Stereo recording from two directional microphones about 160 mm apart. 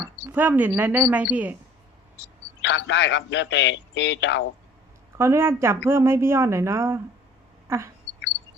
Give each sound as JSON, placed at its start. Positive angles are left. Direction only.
{"t": 0.3, "sound": "speech", "side_deg": -10}
{"t": 2.1, "sound": "a man's voice", "side_deg": 90}
{"t": 5.1, "sound": "speech", "side_deg": -15}